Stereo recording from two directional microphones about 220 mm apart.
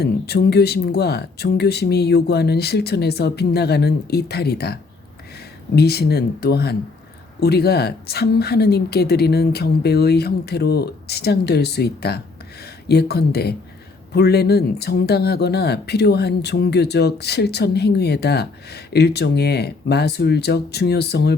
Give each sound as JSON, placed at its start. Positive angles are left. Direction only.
{"t": 0.0, "sound": "speech", "side_deg": 45}